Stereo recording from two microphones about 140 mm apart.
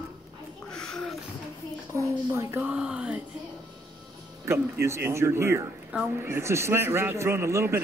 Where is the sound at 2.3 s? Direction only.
20° right (ahead or behind).